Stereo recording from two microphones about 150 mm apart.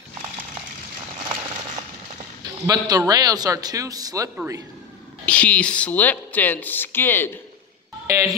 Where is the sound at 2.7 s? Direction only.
25° right (ahead or behind).